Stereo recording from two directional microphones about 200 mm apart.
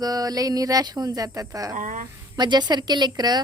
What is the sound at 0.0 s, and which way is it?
Speech, 20° right (ahead or behind).